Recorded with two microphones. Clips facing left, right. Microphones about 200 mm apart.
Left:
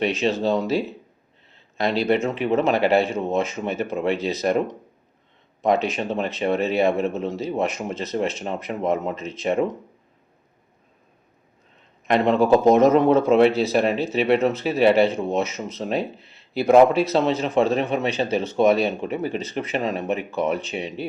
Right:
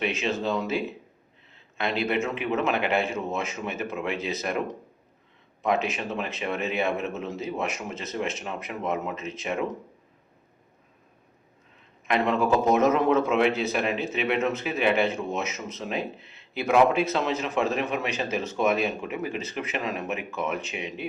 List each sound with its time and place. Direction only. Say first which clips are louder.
0.0 s speech: left 6 dB; 35° left (ahead or behind)
1.8 s speech: left 6 dB; 35° left (ahead or behind)
5.6 s speech: left 5 dB; 35° left (ahead or behind)
12.0 s speech: left 6 dB; 35° left (ahead or behind)